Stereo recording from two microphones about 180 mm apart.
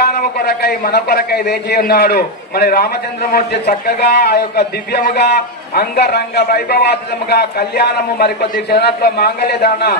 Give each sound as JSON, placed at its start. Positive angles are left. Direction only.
{"t": 0.0, "sound": "a man's voice", "side_deg": 60}